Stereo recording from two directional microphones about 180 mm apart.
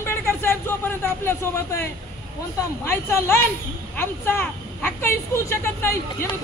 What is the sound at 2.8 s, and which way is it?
Speech, 15° left (ahead or behind).